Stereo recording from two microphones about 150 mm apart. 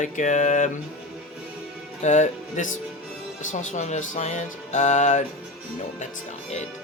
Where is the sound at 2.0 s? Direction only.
55° left (ahead or behind).